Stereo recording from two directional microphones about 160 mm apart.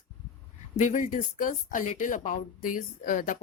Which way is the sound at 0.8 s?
50° left (ahead or behind).